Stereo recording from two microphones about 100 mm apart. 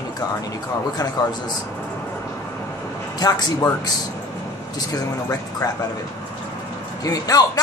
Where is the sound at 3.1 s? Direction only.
40° left (ahead or behind).